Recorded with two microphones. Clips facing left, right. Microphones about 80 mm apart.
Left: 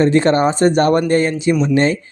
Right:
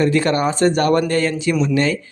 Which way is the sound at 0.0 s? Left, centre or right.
Left.